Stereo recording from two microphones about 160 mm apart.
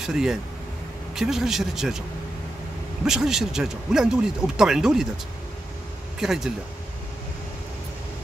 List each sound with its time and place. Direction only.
0.0 s speech: 5° right (ahead or behind)
3.1 s speech: 5° right (ahead or behind)
6.1 s speech: 5° right (ahead or behind)